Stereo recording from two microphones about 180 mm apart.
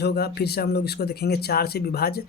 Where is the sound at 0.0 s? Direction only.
60° left (ahead or behind).